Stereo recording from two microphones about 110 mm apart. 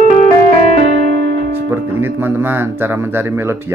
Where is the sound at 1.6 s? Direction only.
20° right (ahead or behind).